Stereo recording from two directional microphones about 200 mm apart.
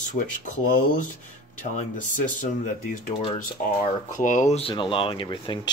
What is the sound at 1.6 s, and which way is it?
Speech, 40° left (ahead or behind).